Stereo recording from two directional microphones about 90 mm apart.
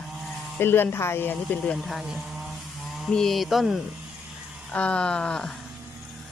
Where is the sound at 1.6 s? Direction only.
Centre (ahead or behind).